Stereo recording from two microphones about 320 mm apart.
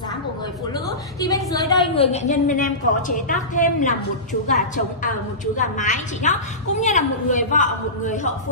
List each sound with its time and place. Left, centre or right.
0.7 s a woman's voice: centre